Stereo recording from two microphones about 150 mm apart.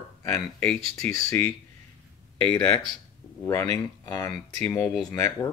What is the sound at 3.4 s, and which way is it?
Speech, 20° left (ahead or behind).